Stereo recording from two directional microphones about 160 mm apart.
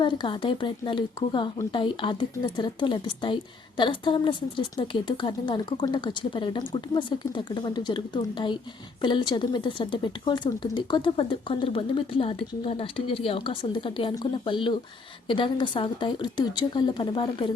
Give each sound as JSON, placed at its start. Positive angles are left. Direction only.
{"t": 0.0, "sound": "a woman's voice", "side_deg": 30}